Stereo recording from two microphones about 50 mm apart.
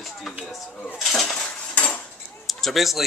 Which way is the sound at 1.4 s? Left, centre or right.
Left.